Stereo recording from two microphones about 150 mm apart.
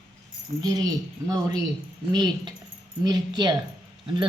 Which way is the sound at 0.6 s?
25° right (ahead or behind).